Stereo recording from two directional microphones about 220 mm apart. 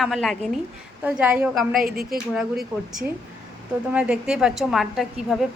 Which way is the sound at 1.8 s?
45° right (ahead or behind).